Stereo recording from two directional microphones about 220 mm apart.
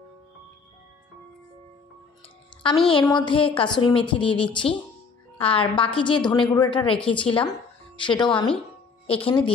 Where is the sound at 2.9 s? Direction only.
20° left (ahead or behind).